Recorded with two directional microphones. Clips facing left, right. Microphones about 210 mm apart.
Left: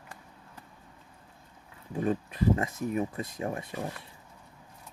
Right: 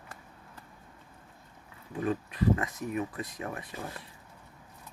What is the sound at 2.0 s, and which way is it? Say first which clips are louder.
Speech: left 2 dB; 25° left (ahead or behind).